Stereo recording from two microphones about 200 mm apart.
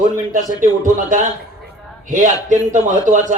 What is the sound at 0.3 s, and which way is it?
A man's voice, 40° right (ahead or behind).